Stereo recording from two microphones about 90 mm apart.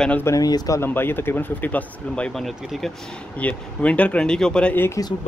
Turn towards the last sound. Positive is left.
turn(degrees=25)  # may be behind; listen again after turning